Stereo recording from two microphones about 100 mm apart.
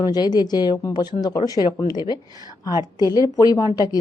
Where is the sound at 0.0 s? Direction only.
40° left (ahead or behind).